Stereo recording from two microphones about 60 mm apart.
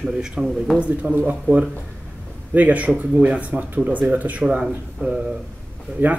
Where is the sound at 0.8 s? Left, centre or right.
Right.